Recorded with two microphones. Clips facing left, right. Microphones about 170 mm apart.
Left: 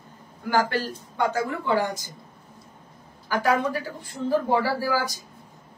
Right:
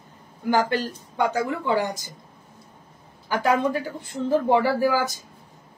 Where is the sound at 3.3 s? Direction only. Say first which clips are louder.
Right 1 dB; 20° right (ahead or behind).